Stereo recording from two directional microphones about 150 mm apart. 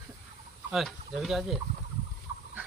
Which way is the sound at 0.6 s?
Centre (ahead or behind).